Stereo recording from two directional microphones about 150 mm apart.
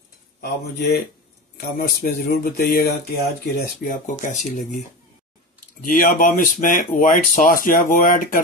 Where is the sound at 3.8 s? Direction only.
65° left (ahead or behind).